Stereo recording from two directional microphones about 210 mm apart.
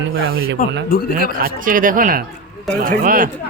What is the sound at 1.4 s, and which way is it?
Speech, 40° right (ahead or behind).